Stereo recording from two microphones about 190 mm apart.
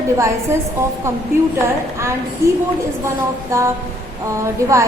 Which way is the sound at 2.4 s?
15° right (ahead or behind).